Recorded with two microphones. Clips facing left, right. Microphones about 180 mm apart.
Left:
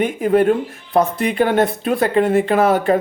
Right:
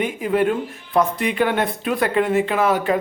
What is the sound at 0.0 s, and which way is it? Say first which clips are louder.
Speech: left 5 dB; 45° left (ahead or behind).